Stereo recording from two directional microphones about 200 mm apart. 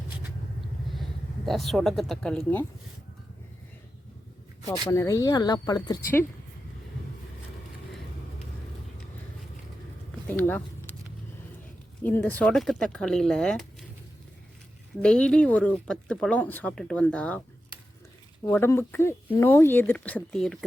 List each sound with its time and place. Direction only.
1.5 s speech: centre (ahead or behind)
4.9 s speech: 15° left (ahead or behind)
10.2 s speech: 10° left (ahead or behind)
12.0 s speech: 10° left (ahead or behind)
15.0 s speech: 5° left (ahead or behind)
18.4 s speech: 10° left (ahead or behind)